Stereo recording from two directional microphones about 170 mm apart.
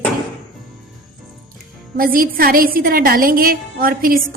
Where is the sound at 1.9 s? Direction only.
60° right (ahead or behind).